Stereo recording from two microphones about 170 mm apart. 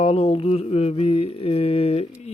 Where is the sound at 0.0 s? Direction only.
35° left (ahead or behind).